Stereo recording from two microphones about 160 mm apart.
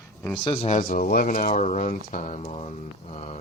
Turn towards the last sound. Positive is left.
turn(degrees=40)  # may be behind; listen again after turning